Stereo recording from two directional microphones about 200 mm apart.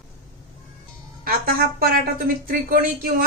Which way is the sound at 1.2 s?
50° right (ahead or behind).